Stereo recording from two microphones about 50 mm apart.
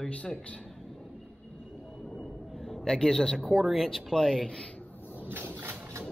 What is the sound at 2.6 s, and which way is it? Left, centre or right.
A man's voice, centre.